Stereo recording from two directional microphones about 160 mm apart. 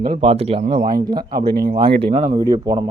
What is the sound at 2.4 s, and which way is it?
Speech, 25° right (ahead or behind).